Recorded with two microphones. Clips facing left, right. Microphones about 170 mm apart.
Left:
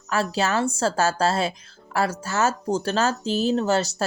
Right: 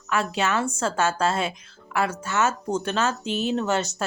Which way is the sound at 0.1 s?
35° left (ahead or behind).